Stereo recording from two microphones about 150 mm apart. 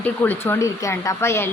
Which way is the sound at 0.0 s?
15° left (ahead or behind).